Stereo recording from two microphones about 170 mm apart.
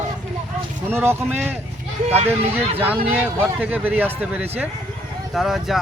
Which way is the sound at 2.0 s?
40° right (ahead or behind).